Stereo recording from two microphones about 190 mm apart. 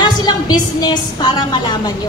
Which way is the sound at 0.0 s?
20° left (ahead or behind).